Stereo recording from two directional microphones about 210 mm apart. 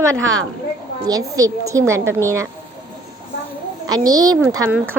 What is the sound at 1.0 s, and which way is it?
A woman's voice, 15° right (ahead or behind).